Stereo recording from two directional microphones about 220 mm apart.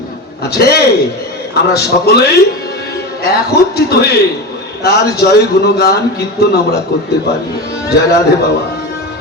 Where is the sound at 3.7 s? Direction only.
45° left (ahead or behind).